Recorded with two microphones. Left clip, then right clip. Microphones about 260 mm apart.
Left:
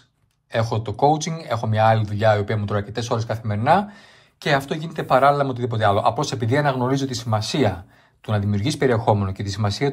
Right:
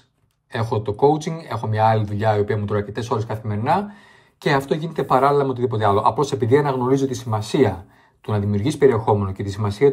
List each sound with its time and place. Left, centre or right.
0.5 s speech: centre